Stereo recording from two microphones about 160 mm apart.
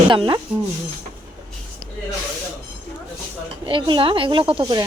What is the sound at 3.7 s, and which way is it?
Speech, 30° right (ahead or behind).